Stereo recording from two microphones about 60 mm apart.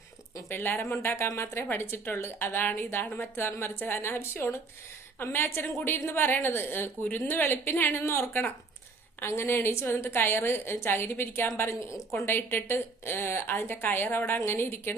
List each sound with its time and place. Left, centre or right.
0.4 s a woman's voice: left